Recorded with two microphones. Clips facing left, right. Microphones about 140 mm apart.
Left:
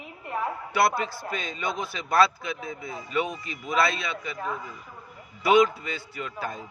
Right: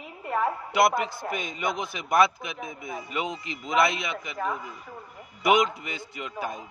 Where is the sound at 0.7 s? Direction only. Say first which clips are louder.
Even; 20° right (ahead or behind).